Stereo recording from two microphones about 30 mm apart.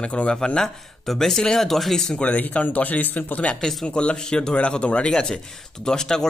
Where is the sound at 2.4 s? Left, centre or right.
Left.